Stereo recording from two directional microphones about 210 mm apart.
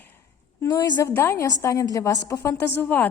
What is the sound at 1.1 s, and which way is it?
A woman's voice, 10° left (ahead or behind).